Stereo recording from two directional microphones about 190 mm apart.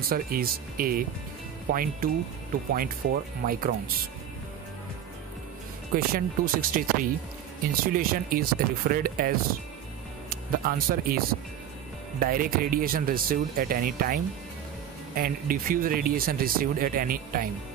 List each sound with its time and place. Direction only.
0.1 s speech: 50° right (ahead or behind)
5.9 s speech: 50° right (ahead or behind)
10.3 s speech: 50° right (ahead or behind)